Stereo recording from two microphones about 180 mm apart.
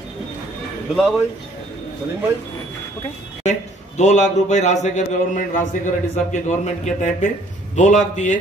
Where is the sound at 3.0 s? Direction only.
40° left (ahead or behind).